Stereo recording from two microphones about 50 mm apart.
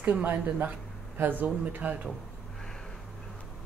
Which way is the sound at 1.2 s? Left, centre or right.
Right.